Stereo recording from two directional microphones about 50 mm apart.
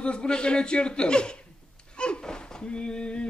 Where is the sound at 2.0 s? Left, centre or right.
Centre.